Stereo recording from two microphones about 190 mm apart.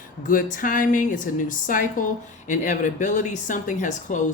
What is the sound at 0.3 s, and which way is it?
Speech, 45° left (ahead or behind).